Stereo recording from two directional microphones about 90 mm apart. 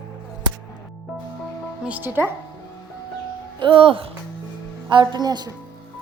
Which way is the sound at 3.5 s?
70° right (ahead or behind).